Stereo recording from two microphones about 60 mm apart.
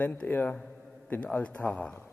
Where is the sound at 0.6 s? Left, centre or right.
Centre.